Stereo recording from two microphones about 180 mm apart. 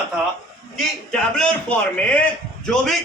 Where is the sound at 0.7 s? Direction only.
5° left (ahead or behind).